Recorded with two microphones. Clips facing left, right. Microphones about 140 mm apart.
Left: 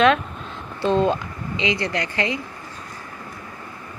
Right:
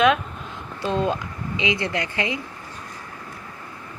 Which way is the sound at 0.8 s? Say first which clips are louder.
Left 4 dB; 30° left (ahead or behind).